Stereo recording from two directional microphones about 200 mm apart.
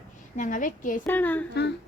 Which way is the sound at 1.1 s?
10° left (ahead or behind).